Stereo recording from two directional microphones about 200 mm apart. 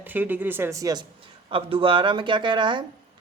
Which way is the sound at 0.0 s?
10° right (ahead or behind).